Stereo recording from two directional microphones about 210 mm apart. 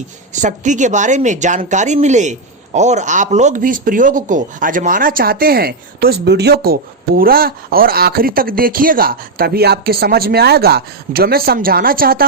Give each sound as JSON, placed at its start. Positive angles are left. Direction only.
{"t": 0.3, "sound": "speech", "side_deg": -35}